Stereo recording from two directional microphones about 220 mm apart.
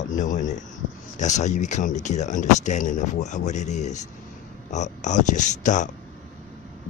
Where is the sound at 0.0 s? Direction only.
35° left (ahead or behind).